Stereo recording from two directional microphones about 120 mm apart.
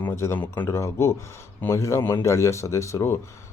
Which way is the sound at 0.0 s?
20° left (ahead or behind).